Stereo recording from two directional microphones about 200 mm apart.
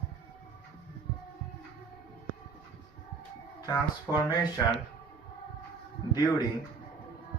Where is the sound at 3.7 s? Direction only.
15° left (ahead or behind).